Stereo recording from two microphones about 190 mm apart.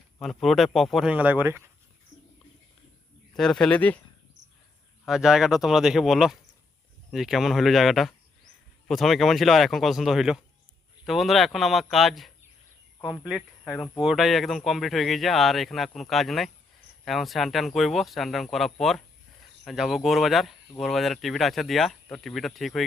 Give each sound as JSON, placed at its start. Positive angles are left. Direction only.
{"t": 0.2, "sound": "speech", "side_deg": 0}
{"t": 3.3, "sound": "speech", "side_deg": 0}
{"t": 5.0, "sound": "speech", "side_deg": 0}